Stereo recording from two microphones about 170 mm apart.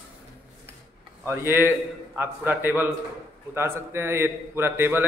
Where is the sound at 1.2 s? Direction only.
15° right (ahead or behind).